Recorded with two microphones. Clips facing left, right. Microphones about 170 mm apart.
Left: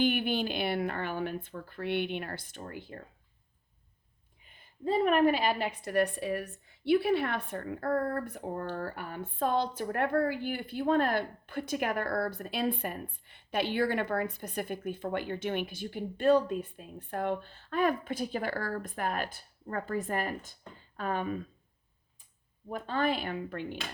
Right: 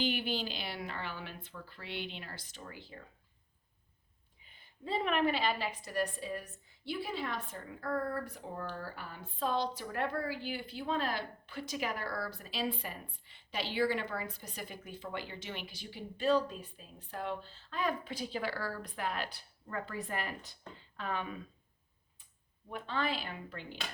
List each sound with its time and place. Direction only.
0.0 s speech: 55° left (ahead or behind)
4.9 s speech: 45° left (ahead or behind)
22.7 s speech: 45° left (ahead or behind)